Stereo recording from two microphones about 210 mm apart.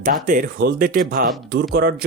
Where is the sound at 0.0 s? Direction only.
40° right (ahead or behind).